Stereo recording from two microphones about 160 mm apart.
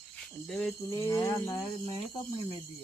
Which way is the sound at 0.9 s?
15° left (ahead or behind).